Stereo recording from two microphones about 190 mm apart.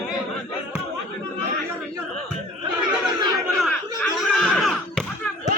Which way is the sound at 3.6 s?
Centre (ahead or behind).